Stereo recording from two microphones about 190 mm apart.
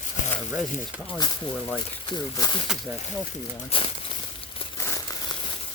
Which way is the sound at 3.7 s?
30° left (ahead or behind).